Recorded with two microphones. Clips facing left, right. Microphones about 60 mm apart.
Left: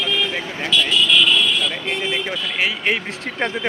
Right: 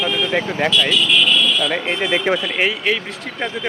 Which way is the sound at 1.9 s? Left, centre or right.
Right.